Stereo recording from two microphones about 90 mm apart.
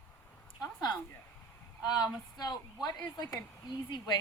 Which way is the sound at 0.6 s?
50° left (ahead or behind).